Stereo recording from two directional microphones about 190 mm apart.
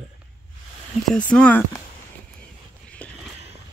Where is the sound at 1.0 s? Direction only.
5° left (ahead or behind).